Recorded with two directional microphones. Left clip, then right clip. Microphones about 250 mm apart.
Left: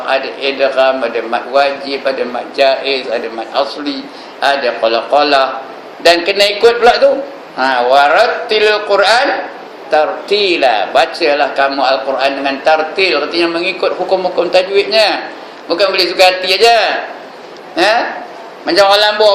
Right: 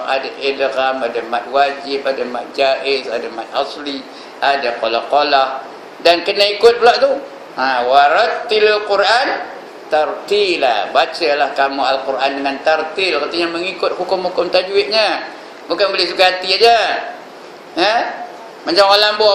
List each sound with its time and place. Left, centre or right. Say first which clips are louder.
0.0 s a man's voice: left 3 dB; centre